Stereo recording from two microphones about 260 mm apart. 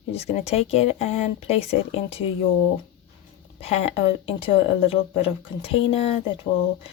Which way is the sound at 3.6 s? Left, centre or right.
Left.